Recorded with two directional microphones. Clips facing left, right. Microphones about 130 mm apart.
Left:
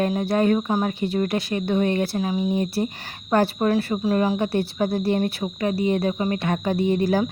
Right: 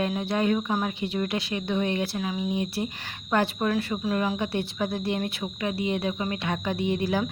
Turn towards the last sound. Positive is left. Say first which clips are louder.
# left 5 dB
turn(degrees=40)  # may be behind; listen again after turning